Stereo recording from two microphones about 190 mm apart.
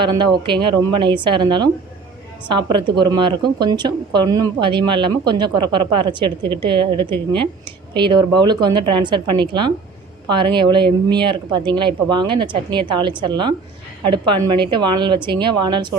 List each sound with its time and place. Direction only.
0.0 s speech: 25° right (ahead or behind)